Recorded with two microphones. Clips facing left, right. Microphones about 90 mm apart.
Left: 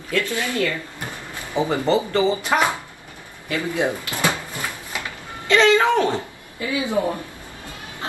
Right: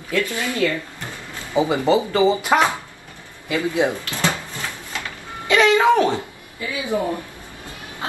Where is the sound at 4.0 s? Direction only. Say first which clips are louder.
Even; 15° left (ahead or behind).